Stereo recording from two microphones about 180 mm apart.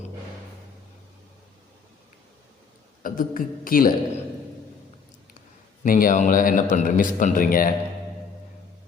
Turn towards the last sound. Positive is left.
turn(degrees=50)  # may be behind; listen again after turning